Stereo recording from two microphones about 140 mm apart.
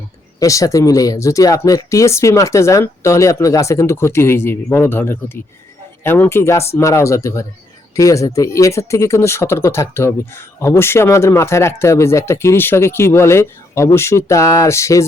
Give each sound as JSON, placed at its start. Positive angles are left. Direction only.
{"t": 0.3, "sound": "speech", "side_deg": 25}